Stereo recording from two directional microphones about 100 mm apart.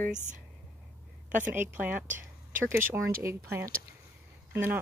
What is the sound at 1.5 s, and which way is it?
Speech, 15° right (ahead or behind).